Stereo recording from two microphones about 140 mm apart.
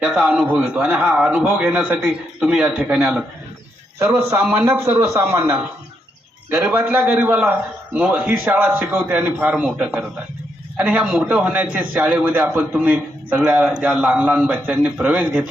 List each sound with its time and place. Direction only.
0.0 s a man's voice: 5° right (ahead or behind)